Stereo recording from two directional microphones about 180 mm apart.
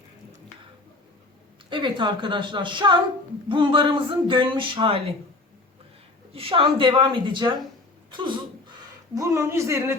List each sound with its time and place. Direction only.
1.7 s speech: 25° right (ahead or behind)
6.3 s speech: 30° right (ahead or behind)
8.1 s a sound: 25° right (ahead or behind)
9.1 s speech: 15° right (ahead or behind)